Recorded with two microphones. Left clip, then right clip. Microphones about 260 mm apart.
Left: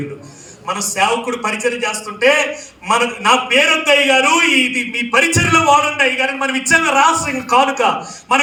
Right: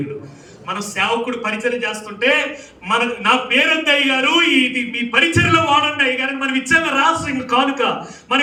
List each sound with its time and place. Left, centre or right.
0.7 s a man's voice: centre